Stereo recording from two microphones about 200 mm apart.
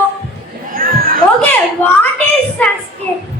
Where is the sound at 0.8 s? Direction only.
45° right (ahead or behind).